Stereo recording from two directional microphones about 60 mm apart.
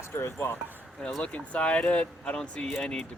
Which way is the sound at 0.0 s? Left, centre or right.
Left.